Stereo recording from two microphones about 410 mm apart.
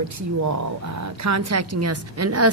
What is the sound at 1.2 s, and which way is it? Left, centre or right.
A woman's voice, right.